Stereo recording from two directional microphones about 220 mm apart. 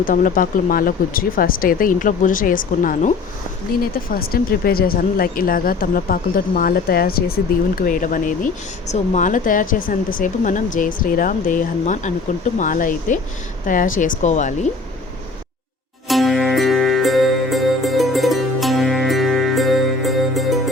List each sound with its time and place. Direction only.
0.0 s speech: 40° left (ahead or behind)
16.0 s music: centre (ahead or behind)